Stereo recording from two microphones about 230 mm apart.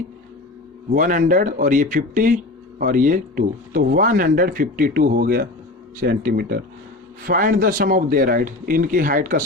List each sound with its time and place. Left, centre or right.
0.9 s speech: right